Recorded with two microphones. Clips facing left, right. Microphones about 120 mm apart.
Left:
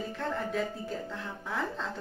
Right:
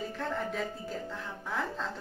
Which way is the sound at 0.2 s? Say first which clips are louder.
Left 2 dB; centre (ahead or behind).